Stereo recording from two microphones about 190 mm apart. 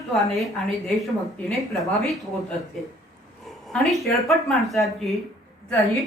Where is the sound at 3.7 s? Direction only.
Centre (ahead or behind).